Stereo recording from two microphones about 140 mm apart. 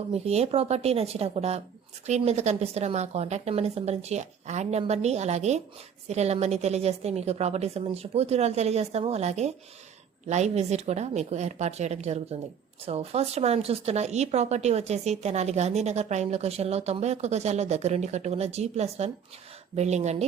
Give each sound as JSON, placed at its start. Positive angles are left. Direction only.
{"t": 0.1, "sound": "a woman's voice", "side_deg": -50}